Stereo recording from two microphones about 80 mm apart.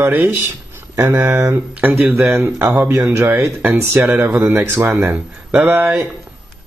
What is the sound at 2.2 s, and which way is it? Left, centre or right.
A man's voice, right.